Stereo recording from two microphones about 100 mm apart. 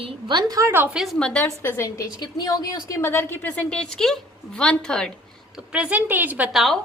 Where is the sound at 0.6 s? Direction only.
20° right (ahead or behind).